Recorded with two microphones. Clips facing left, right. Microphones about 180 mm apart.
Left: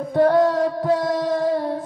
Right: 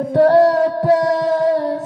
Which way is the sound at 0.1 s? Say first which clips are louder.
Right 5 dB; 70° right (ahead or behind).